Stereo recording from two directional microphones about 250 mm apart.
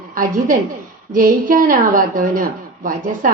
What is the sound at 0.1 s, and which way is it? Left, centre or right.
A woman's voice, right.